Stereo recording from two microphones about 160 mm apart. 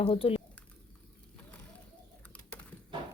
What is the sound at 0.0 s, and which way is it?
Speech, 35° left (ahead or behind).